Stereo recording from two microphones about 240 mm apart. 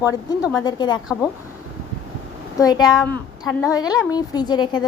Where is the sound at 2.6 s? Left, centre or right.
Centre.